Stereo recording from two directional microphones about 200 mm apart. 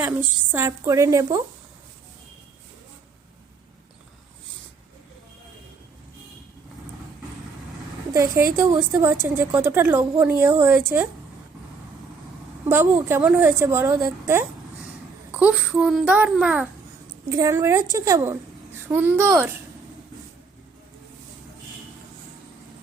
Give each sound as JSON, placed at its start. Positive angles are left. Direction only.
{"t": 0.0, "sound": "a woman's voice", "side_deg": -10}
{"t": 8.1, "sound": "a woman's voice", "side_deg": -15}
{"t": 12.6, "sound": "a woman's voice", "side_deg": -10}
{"t": 17.2, "sound": "a woman's voice", "side_deg": -15}